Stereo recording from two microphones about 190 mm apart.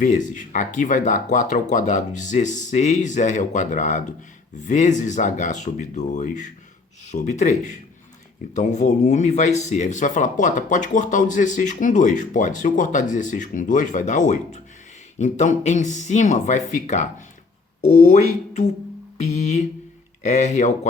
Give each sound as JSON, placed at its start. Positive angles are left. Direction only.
{"t": 0.0, "sound": "speech", "side_deg": 40}
{"t": 8.5, "sound": "speech", "side_deg": 40}
{"t": 19.1, "sound": "speech", "side_deg": 35}